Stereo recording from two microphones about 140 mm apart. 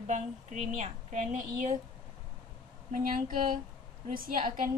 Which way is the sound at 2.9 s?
75° right (ahead or behind).